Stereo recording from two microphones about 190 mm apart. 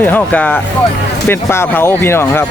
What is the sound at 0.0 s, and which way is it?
Speech, 10° left (ahead or behind).